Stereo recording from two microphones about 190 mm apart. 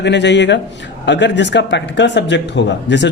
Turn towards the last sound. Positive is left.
turn(degrees=70)  # may be behind; listen again after turning